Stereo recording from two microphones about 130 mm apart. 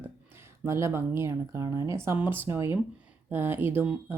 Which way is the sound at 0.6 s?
20° right (ahead or behind).